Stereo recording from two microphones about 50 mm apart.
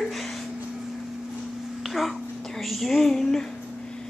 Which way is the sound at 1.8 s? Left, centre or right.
Centre.